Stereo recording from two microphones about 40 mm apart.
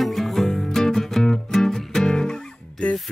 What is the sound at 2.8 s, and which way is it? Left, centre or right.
Music, left.